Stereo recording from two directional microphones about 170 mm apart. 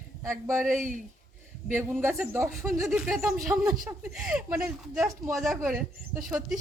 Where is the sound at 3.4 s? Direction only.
20° right (ahead or behind).